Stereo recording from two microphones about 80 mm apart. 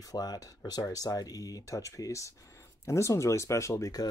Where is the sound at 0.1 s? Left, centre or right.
Left.